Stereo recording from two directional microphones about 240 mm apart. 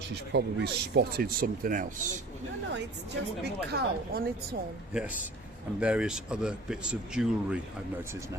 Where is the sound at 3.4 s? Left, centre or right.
Right.